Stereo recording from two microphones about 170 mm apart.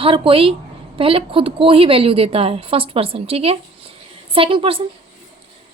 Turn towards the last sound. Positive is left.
turn(degrees=-30)  # may be behind; listen again after turning